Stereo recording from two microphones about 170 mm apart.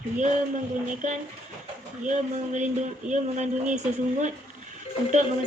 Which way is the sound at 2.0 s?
45° right (ahead or behind).